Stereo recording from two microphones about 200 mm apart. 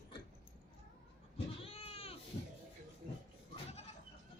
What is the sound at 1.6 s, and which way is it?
Cat, 30° left (ahead or behind).